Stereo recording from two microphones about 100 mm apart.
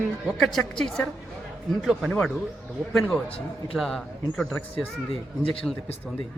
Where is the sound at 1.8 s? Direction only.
5° right (ahead or behind).